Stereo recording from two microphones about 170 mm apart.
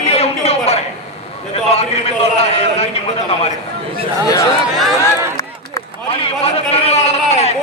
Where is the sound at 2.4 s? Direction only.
40° left (ahead or behind).